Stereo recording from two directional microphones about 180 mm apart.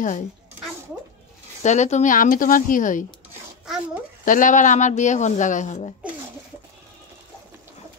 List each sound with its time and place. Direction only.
1.6 s a woman's voice: 40° left (ahead or behind)
4.2 s a woman's voice: 45° left (ahead or behind)